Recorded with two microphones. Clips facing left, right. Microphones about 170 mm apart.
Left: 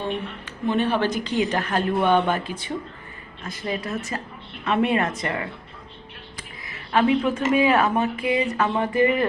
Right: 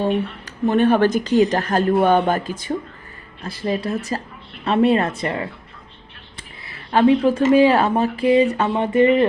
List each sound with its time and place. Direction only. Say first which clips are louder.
0.0 s a woman's voice: right 7 dB; 40° right (ahead or behind)
3.4 s a woman's voice: right 6 dB; 30° right (ahead or behind)